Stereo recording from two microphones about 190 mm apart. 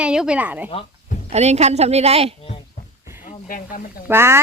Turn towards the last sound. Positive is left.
turn(degrees=-15)  # may be behind; listen again after turning